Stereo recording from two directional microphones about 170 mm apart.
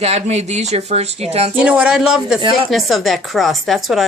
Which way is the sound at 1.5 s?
5° right (ahead or behind).